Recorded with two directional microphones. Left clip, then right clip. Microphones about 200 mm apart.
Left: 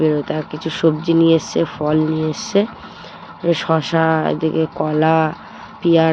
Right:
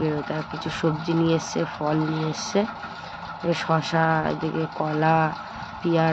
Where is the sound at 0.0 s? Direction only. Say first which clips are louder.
Left 9 dB; 20° left (ahead or behind).